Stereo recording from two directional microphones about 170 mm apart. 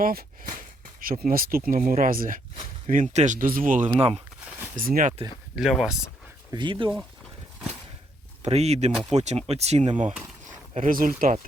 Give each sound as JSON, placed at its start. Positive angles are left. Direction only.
{"t": 0.0, "sound": "speech", "side_deg": -60}
{"t": 3.9, "sound": "speech", "side_deg": -35}
{"t": 4.8, "sound": "speech", "side_deg": -55}
{"t": 5.5, "sound": "speech", "side_deg": 0}
{"t": 6.5, "sound": "speech", "side_deg": -30}
{"t": 8.4, "sound": "speech", "side_deg": -40}
{"t": 10.8, "sound": "speech", "side_deg": -55}